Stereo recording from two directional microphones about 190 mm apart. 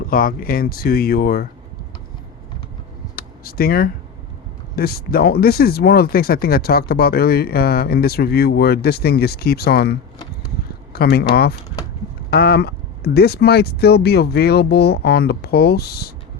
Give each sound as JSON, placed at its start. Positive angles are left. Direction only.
{"t": 0.1, "sound": "speech", "side_deg": 50}
{"t": 3.2, "sound": "a sound", "side_deg": 55}
{"t": 4.7, "sound": "speech", "side_deg": 55}